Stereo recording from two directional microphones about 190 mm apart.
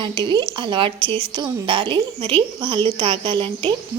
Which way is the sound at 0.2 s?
25° right (ahead or behind).